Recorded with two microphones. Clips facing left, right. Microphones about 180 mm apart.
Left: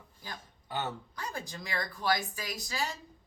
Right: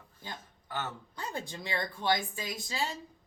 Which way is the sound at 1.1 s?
25° right (ahead or behind).